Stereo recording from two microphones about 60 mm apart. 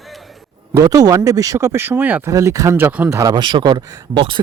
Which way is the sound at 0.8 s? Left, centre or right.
Right.